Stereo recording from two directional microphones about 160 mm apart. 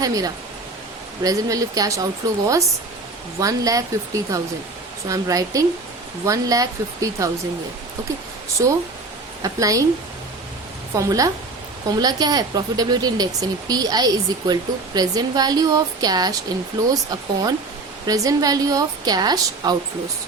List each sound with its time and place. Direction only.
0.0 s speech: 20° right (ahead or behind)
8.6 s speech: 20° right (ahead or behind)
10.9 s speech: 20° right (ahead or behind)